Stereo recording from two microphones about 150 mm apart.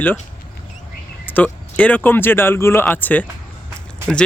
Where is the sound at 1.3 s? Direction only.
10° left (ahead or behind).